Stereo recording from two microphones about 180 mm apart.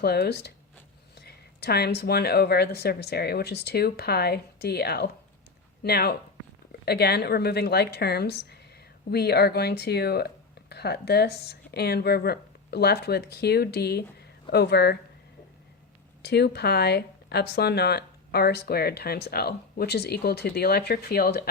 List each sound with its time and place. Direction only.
0.0 s speech: 65° left (ahead or behind)
16.2 s speech: 65° left (ahead or behind)